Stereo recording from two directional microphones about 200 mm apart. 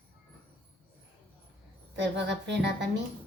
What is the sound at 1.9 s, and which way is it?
Speech, 60° right (ahead or behind).